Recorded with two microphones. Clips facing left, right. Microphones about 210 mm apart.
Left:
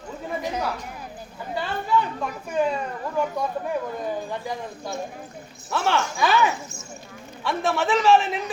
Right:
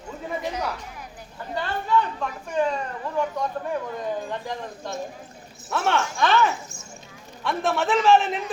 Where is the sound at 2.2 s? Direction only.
5° left (ahead or behind).